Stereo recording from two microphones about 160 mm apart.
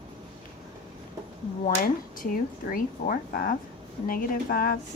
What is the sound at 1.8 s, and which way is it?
A woman's voice, 60° left (ahead or behind).